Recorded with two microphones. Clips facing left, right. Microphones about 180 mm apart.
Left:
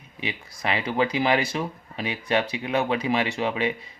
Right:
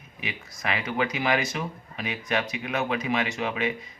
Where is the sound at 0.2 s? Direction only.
30° left (ahead or behind).